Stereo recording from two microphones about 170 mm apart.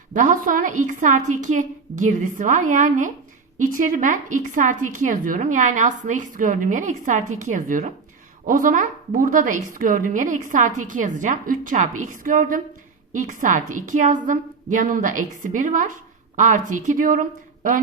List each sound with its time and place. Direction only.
0.1 s a woman's voice: 50° right (ahead or behind)